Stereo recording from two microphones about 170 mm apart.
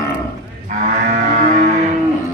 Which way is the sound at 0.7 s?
45° right (ahead or behind).